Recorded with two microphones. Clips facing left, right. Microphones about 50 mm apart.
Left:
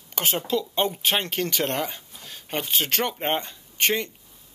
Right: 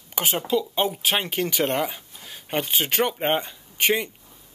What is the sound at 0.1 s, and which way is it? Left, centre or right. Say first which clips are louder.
Speech: right 2 dB; centre.